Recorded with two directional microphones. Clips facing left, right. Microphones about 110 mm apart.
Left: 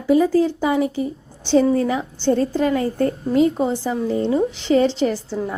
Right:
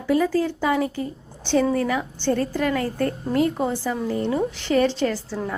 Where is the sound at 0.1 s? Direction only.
20° left (ahead or behind).